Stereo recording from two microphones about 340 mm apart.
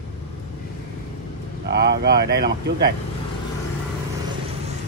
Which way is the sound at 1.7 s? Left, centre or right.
Right.